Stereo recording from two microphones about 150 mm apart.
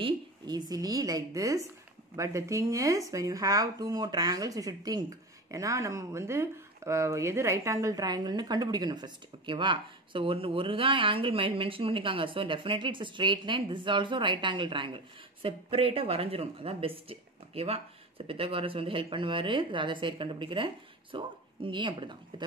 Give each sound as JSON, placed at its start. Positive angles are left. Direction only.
{"t": 0.0, "sound": "speech", "side_deg": -30}